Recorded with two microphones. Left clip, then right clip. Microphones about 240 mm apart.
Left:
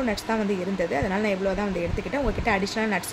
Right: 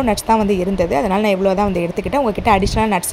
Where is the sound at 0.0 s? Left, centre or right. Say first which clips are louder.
Right 11 dB; right.